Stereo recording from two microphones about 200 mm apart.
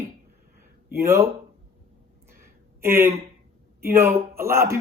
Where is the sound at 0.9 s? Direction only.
15° right (ahead or behind).